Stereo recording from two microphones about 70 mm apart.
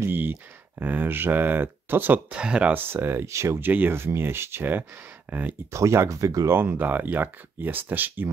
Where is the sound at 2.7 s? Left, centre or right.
Right.